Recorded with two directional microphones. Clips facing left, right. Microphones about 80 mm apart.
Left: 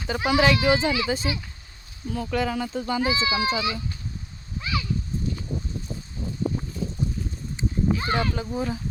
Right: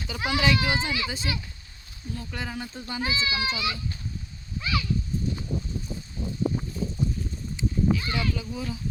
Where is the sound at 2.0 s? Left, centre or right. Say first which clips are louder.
Left 9 dB; left.